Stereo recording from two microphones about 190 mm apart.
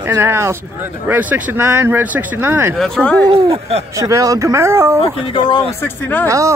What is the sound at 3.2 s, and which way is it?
Speech, 30° right (ahead or behind).